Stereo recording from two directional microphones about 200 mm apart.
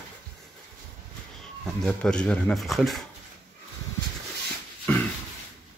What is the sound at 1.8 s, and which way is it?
Speech, 5° left (ahead or behind).